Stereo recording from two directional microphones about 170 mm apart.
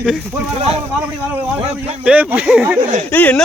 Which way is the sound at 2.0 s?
10° right (ahead or behind).